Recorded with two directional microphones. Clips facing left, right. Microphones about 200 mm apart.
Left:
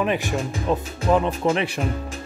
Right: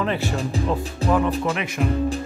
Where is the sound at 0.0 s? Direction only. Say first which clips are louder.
Left 1 dB; 15° left (ahead or behind).